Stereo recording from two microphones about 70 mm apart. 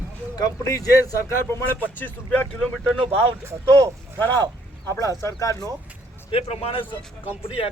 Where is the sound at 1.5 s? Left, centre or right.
Left.